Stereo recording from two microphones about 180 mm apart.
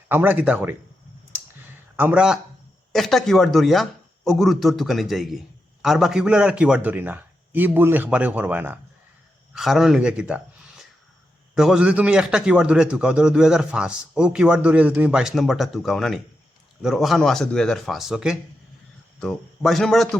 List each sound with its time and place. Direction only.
0.1 s a man's voice: 10° right (ahead or behind)
2.0 s a man's voice: 10° right (ahead or behind)